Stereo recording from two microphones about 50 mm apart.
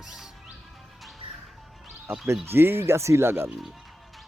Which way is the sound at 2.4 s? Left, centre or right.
Right.